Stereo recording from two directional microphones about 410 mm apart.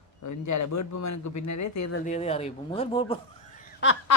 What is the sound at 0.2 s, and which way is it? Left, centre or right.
A man's voice, left.